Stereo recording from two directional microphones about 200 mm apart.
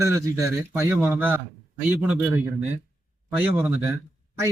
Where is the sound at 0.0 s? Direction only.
15° right (ahead or behind).